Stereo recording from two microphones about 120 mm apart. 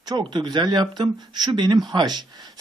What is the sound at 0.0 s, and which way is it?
Speech, 35° right (ahead or behind).